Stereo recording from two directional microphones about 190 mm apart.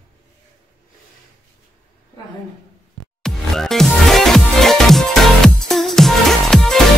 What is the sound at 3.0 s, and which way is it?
Music, centre (ahead or behind).